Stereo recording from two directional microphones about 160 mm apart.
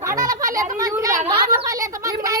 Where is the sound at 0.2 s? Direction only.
20° right (ahead or behind).